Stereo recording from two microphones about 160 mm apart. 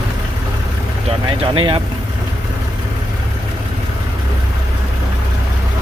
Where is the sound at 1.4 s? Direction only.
35° right (ahead or behind).